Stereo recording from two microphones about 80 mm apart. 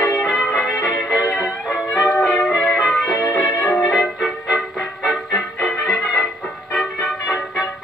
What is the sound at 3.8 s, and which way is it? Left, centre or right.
Music, centre.